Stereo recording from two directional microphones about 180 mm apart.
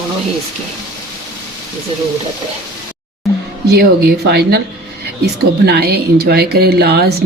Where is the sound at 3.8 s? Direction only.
60° right (ahead or behind).